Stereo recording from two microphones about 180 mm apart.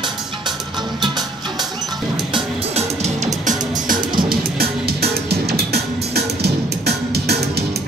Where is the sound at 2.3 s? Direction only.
35° right (ahead or behind).